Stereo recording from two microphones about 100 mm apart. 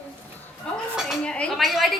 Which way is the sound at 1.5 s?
Centre (ahead or behind).